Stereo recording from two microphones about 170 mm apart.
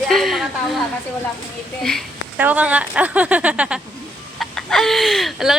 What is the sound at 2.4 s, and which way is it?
Speech, 10° right (ahead or behind).